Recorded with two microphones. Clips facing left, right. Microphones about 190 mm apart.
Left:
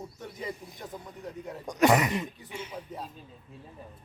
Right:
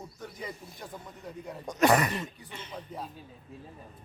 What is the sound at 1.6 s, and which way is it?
Speech, 15° left (ahead or behind).